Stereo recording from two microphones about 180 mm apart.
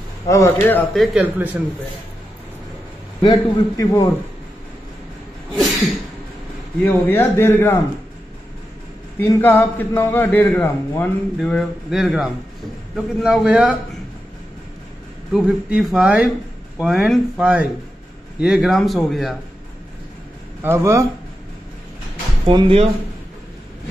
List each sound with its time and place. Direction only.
0.3 s a man's voice: 15° left (ahead or behind)
1.1 s speech: 10° right (ahead or behind)
3.2 s a man's voice: 20° left (ahead or behind)
7.1 s a man's voice: 15° left (ahead or behind)
9.3 s a man's voice: 10° left (ahead or behind); by 13.7 s 5° right (ahead or behind)
15.3 s a man's voice: 5° right (ahead or behind)
20.6 s speech: 15° right (ahead or behind)
22.5 s speech: 30° right (ahead or behind)